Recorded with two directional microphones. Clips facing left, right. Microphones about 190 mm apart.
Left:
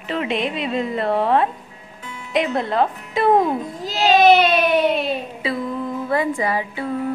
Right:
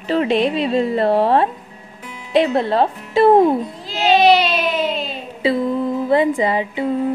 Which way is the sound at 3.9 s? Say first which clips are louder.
Even; 40° left (ahead or behind).